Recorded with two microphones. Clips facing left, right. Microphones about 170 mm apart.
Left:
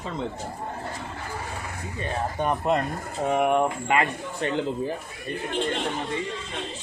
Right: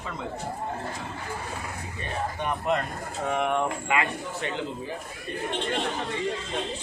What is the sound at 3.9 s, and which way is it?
Speech, 40° left (ahead or behind).